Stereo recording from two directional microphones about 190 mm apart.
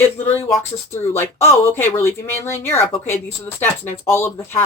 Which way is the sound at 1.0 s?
15° left (ahead or behind).